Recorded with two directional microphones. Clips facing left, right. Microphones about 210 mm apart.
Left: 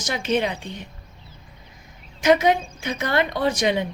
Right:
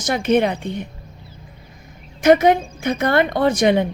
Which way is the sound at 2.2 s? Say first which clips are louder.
Right 5 dB; 55° right (ahead or behind).